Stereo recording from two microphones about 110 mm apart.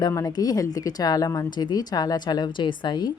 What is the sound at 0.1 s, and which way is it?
A woman's voice, 30° left (ahead or behind).